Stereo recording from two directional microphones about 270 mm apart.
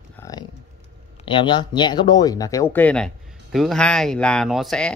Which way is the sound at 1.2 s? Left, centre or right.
Centre.